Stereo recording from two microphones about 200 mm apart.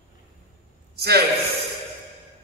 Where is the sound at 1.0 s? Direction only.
55° right (ahead or behind).